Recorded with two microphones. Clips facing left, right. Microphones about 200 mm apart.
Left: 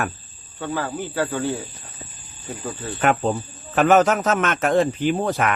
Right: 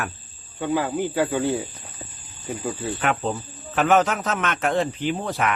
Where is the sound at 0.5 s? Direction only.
15° right (ahead or behind).